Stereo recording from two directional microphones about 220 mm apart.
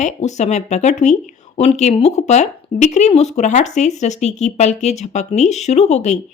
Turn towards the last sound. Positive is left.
turn(degrees=30)  # may be behind; listen again after turning